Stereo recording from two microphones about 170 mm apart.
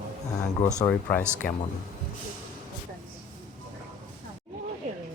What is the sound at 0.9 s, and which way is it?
Speech, 10° left (ahead or behind).